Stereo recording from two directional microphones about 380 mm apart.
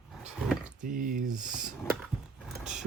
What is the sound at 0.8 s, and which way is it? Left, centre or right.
Speech, right.